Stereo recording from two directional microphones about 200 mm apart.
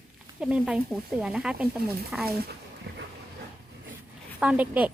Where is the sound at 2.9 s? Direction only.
55° right (ahead or behind).